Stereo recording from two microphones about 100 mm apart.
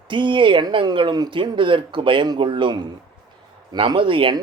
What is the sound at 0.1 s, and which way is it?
Speech, 55° right (ahead or behind).